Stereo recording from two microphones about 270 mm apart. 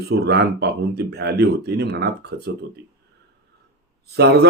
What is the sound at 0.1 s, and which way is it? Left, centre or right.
Speech, right.